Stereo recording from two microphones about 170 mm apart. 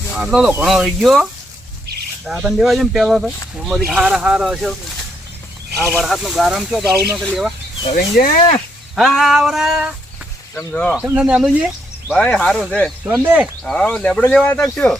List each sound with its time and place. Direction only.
0.1 s speech: centre (ahead or behind)
2.4 s speech: centre (ahead or behind)
6.0 s speech: centre (ahead or behind)
7.9 s speech: 55° left (ahead or behind)
9.0 s speech: centre (ahead or behind)
10.5 s speech: 15° left (ahead or behind)
10.9 s speech: 10° right (ahead or behind)
12.0 s speech: 5° left (ahead or behind)
13.1 s speech: 10° right (ahead or behind)
13.7 s speech: 5° left (ahead or behind)